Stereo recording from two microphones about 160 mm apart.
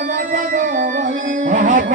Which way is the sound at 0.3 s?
55° right (ahead or behind).